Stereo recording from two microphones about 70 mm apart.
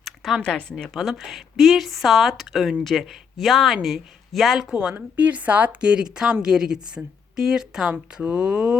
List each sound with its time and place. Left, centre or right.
0.4 s a woman's voice: centre
0.9 s speech: centre
4.7 s speech: centre